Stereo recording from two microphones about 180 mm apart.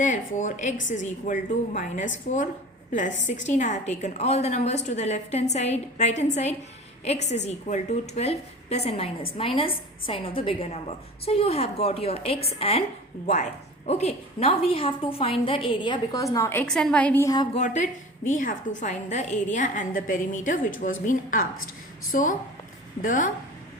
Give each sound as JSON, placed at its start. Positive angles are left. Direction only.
{"t": 0.0, "sound": "a woman's voice", "side_deg": 45}
{"t": 3.2, "sound": "a woman's voice", "side_deg": 45}
{"t": 17.2, "sound": "a woman's voice", "side_deg": 25}
{"t": 18.3, "sound": "a woman's voice", "side_deg": 45}